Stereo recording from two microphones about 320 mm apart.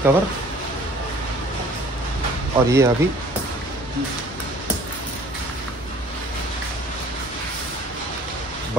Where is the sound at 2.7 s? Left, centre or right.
Centre.